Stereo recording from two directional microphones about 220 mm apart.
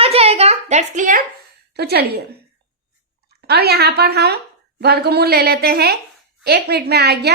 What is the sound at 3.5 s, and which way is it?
A woman's voice, 45° right (ahead or behind).